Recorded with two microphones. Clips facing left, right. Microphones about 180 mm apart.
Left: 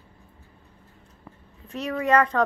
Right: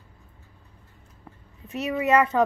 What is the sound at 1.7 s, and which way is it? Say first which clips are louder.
Speech: even; 5° right (ahead or behind).